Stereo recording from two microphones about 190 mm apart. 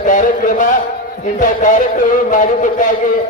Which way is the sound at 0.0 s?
45° left (ahead or behind).